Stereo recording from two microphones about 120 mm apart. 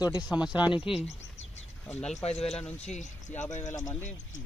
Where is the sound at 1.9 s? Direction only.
5° left (ahead or behind).